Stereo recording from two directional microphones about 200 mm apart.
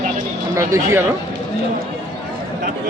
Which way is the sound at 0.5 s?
15° right (ahead or behind).